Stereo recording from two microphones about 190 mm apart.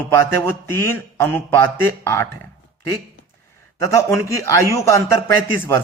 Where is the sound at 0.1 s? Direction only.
15° left (ahead or behind).